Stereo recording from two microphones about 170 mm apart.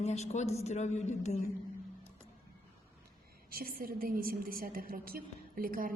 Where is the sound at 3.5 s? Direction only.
60° right (ahead or behind).